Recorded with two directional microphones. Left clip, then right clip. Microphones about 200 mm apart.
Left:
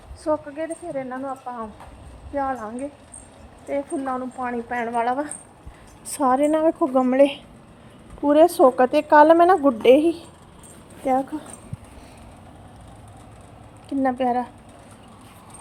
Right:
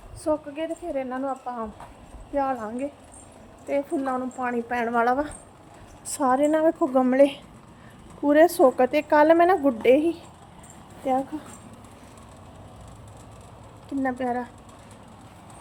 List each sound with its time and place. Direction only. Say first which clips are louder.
0.3 s speech: left 2 dB; 5° left (ahead or behind)
6.1 s a woman's voice: left 2 dB; 10° left (ahead or behind)
14.0 s speech: left 5 dB; 20° left (ahead or behind)